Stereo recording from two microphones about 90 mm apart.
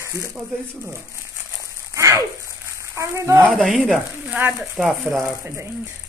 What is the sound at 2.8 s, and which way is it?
Speech, 30° right (ahead or behind).